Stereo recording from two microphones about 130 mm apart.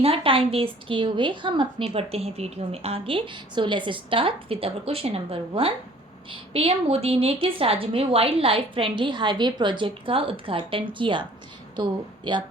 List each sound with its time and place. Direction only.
0.0 s a woman's voice: 45° right (ahead or behind)
1.8 s a woman's voice: 50° right (ahead or behind)